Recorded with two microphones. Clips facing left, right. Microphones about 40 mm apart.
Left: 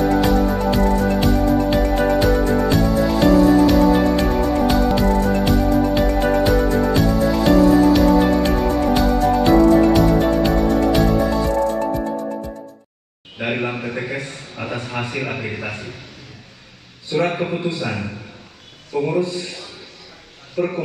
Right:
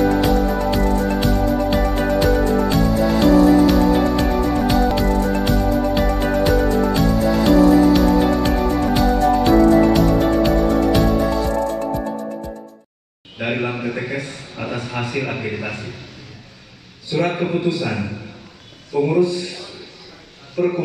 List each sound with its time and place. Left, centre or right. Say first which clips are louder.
0.0 s music: even; centre
13.4 s a sound: right 1 dB; centre
14.9 s a man's voice: right 2 dB; centre
17.1 s a man's voice: even; centre
18.9 s a man's voice: right 3 dB; centre
20.5 s a man's voice: right 2 dB; centre